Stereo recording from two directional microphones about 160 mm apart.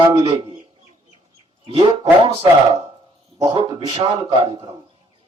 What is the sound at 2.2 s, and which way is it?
Speech, 35° right (ahead or behind).